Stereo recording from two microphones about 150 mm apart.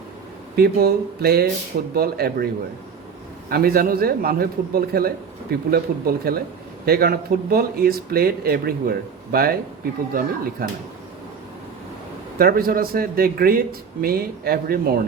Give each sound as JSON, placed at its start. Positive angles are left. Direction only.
{"t": 0.5, "sound": "a man's voice", "side_deg": -90}
{"t": 3.5, "sound": "a man's voice", "side_deg": -80}
{"t": 10.2, "sound": "a man's voice", "side_deg": -75}
{"t": 12.4, "sound": "a man's voice", "side_deg": -75}